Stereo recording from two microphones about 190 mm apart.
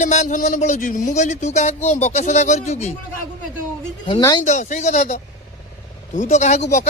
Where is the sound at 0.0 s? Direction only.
40° left (ahead or behind).